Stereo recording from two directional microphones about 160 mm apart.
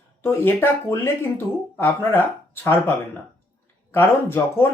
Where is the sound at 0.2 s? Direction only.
15° left (ahead or behind).